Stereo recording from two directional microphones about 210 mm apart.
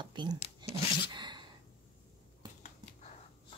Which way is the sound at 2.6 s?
35° left (ahead or behind).